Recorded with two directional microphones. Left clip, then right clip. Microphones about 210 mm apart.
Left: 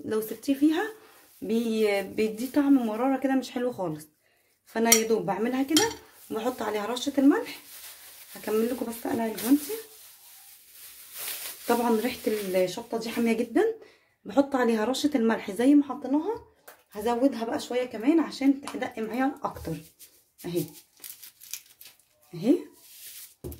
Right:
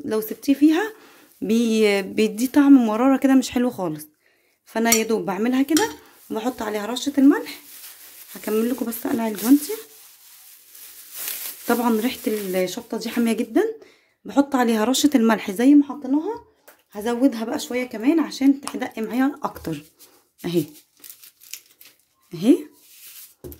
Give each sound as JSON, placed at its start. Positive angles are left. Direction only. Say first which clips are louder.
{"t": 0.0, "sound": "speech", "louder": "right 5 dB", "side_deg": -30}
{"t": 11.6, "sound": "speech", "louder": "right 4 dB", "side_deg": -30}
{"t": 22.3, "sound": "speech", "louder": "right 7 dB", "side_deg": -35}